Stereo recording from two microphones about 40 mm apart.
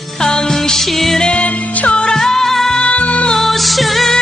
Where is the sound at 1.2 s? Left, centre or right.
Left.